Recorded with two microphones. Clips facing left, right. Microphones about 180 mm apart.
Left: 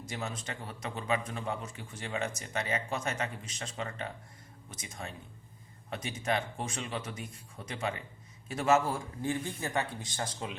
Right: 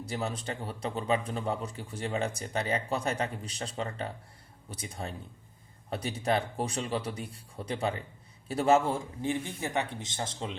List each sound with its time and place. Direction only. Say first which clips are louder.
0.0 s a man's voice: right 5 dB; 35° right (ahead or behind)